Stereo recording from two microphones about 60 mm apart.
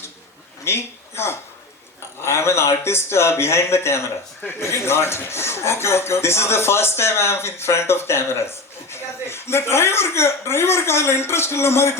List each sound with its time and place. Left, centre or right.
0.6 s a man's voice: left